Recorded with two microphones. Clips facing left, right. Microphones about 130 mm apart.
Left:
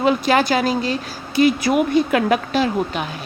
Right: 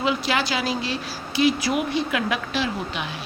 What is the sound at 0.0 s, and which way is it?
A woman's voice, 45° left (ahead or behind).